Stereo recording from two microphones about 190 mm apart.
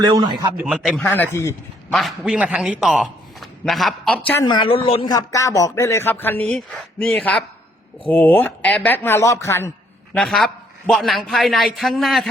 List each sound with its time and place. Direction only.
0.0 s a man's voice: 20° right (ahead or behind)
0.5 s a man's voice: 5° right (ahead or behind)
1.0 s speech: 10° left (ahead or behind)
1.9 s a man's voice: centre (ahead or behind)
4.4 s speech: 25° left (ahead or behind)
10.2 s a man's voice: centre (ahead or behind)